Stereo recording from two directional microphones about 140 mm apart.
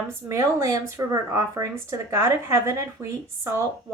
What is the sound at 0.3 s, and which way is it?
Speech, 20° right (ahead or behind).